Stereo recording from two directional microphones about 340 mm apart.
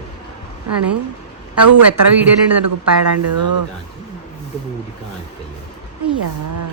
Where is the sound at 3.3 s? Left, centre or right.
Right.